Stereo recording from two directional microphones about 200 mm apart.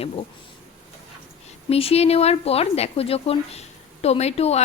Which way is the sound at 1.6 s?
30° left (ahead or behind).